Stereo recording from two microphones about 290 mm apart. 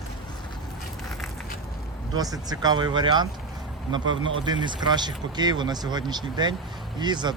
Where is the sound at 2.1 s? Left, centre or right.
Centre.